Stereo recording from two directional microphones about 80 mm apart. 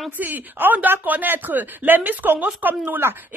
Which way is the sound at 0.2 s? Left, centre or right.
Right.